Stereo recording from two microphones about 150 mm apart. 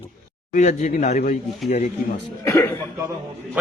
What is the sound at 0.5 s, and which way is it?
Speech, 55° left (ahead or behind).